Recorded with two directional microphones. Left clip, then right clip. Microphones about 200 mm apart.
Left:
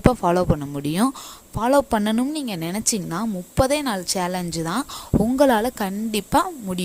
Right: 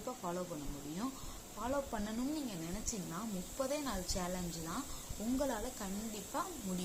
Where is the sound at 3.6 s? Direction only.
50° left (ahead or behind).